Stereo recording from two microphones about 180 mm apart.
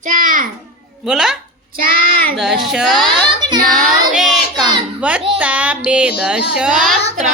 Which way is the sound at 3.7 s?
Centre (ahead or behind).